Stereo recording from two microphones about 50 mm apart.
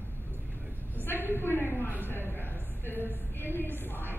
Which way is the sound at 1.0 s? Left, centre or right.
Left.